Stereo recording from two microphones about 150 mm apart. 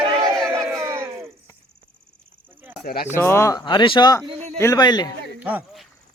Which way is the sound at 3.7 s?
30° left (ahead or behind).